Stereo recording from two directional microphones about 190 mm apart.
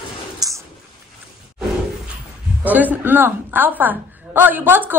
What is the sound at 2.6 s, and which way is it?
A woman's voice, 10° right (ahead or behind).